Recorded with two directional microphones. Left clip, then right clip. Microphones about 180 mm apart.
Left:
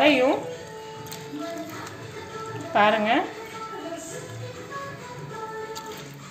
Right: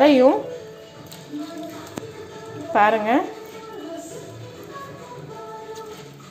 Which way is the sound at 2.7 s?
40° right (ahead or behind).